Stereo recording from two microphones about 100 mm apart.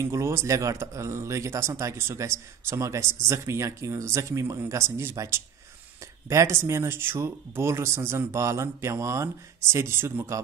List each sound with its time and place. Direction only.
0.0 s speech: 30° right (ahead or behind)